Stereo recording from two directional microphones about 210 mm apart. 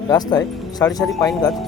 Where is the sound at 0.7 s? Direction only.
20° left (ahead or behind).